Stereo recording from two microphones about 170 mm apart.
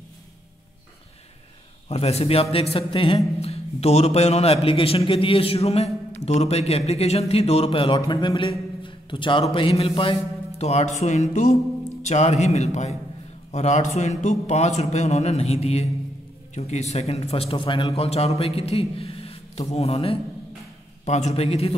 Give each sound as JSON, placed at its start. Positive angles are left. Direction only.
{"t": 1.9, "sound": "a man's voice", "side_deg": 35}